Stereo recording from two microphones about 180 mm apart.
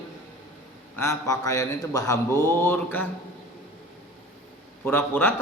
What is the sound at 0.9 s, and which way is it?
Speech, 15° left (ahead or behind).